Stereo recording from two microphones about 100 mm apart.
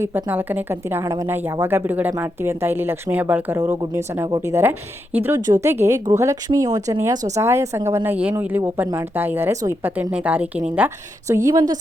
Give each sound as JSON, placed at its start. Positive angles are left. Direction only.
{"t": 0.3, "sound": "a woman's voice", "side_deg": -20}
{"t": 1.0, "sound": "speech", "side_deg": -35}
{"t": 1.3, "sound": "a woman's voice", "side_deg": -20}
{"t": 3.6, "sound": "a woman's voice", "side_deg": -30}
{"t": 11.3, "sound": "speech", "side_deg": -30}